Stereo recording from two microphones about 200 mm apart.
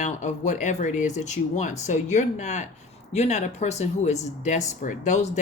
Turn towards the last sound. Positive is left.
turn(degrees=35)  # may be behind; listen again after turning